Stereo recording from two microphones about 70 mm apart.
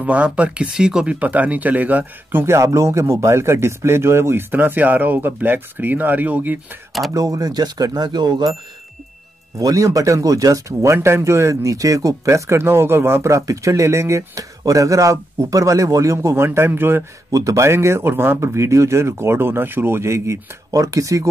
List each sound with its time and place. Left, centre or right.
0.0 s speech: centre
1.2 s speech: right
2.4 s a man's voice: right
7.2 s speech: right
9.6 s speech: right
17.3 s a man's voice: right